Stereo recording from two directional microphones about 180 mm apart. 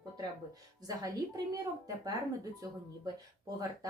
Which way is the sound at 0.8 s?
20° right (ahead or behind).